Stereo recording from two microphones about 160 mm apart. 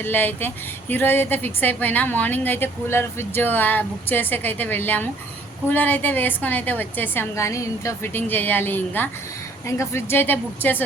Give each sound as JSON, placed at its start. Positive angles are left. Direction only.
{"t": 0.0, "sound": "a woman's voice", "side_deg": 10}